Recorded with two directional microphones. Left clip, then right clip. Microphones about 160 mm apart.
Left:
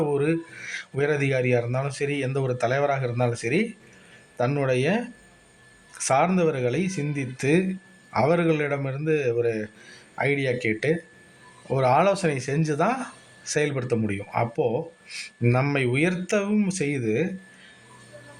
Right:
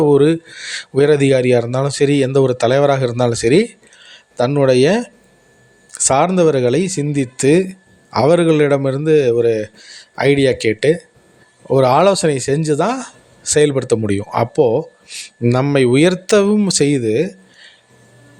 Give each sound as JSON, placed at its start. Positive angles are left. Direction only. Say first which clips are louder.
{"t": 0.0, "sound": "speech", "louder": "right 12 dB", "side_deg": -55}
{"t": 6.1, "sound": "speech", "louder": "right 9 dB", "side_deg": -45}
{"t": 14.5, "sound": "speech", "louder": "right 13 dB", "side_deg": -90}
{"t": 15.2, "sound": "speech", "louder": "right 8 dB", "side_deg": -40}